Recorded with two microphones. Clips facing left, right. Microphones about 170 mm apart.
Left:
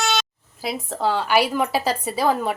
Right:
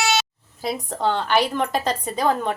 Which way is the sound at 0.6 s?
Centre (ahead or behind).